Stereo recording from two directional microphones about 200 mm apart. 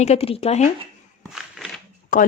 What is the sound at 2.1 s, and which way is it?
Speech, 45° left (ahead or behind).